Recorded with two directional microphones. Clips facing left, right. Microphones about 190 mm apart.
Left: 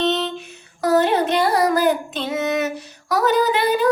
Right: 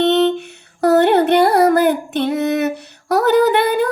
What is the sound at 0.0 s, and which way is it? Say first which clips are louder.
Music: right 7 dB; 60° right (ahead or behind).